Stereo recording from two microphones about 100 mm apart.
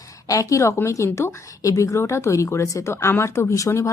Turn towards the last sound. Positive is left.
turn(degrees=30)  # may be behind; listen again after turning